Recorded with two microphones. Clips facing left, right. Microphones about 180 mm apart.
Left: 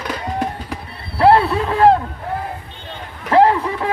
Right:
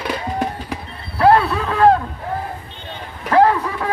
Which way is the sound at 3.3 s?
25° left (ahead or behind).